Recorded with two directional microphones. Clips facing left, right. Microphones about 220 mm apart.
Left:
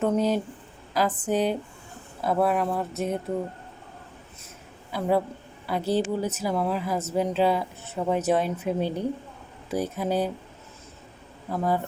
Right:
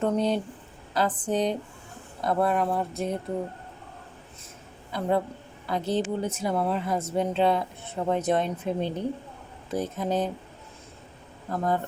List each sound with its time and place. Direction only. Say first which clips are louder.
0.0 s speech: left 1 dB; 5° left (ahead or behind)
4.9 s speech: left 2 dB; 5° left (ahead or behind)
11.4 s speech: left 1 dB; 5° left (ahead or behind)